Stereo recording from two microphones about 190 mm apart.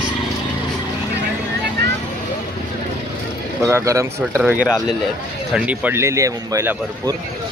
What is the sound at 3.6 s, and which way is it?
Speech, 15° right (ahead or behind).